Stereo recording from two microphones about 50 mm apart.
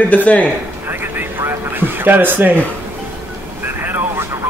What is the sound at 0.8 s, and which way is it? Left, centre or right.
Vehicle, right.